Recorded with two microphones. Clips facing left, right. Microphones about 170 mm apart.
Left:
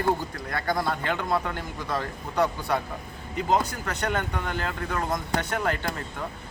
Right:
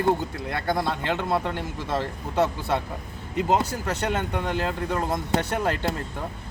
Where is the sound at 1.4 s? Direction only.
25° right (ahead or behind).